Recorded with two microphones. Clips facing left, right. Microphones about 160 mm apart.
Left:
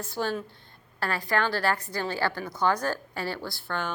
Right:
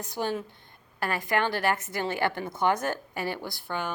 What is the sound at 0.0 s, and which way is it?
A woman's voice, 15° right (ahead or behind).